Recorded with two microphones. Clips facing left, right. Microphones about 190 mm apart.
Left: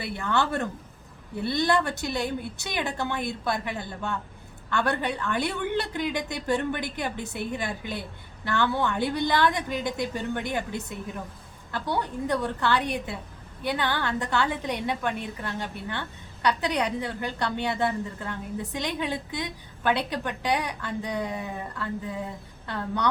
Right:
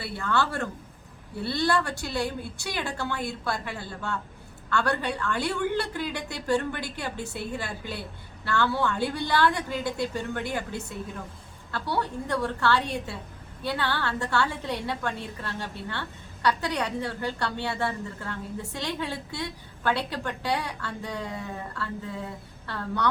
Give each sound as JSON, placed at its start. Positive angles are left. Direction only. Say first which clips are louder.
{"t": 0.0, "sound": "a woman's voice", "louder": "left 1 dB", "side_deg": 20}